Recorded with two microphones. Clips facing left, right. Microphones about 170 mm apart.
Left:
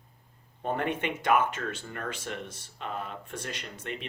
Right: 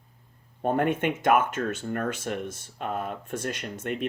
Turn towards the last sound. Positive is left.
turn(degrees=-50)  # may be behind; listen again after turning